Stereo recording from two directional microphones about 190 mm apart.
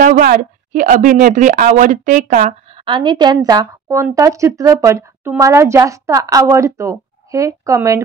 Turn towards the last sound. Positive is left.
turn(degrees=-15)  # may be behind; listen again after turning